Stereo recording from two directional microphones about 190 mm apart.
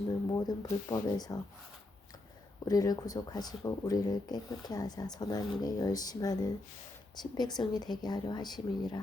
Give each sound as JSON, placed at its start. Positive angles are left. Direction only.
{"t": 0.3, "sound": "speech", "side_deg": 20}
{"t": 2.6, "sound": "speech", "side_deg": 20}